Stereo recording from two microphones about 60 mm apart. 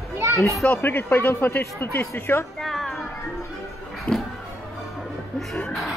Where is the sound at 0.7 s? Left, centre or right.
Left.